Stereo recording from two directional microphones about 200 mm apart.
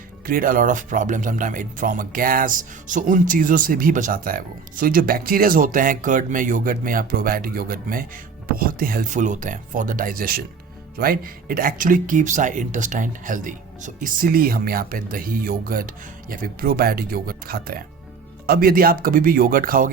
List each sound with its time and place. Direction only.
0.3 s speech: 45° right (ahead or behind)